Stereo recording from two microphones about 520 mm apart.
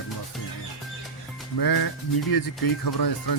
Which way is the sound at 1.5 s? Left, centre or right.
Left.